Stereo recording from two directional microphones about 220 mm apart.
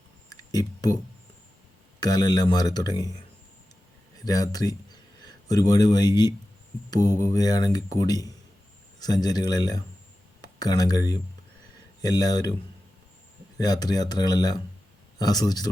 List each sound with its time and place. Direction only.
0.3 s a sound: 15° left (ahead or behind)
2.0 s speech: 15° left (ahead or behind)
4.3 s speech: 15° left (ahead or behind)
13.6 s speech: 20° left (ahead or behind)